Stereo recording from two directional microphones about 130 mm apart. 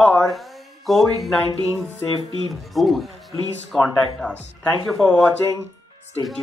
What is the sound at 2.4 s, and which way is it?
Speech, centre (ahead or behind).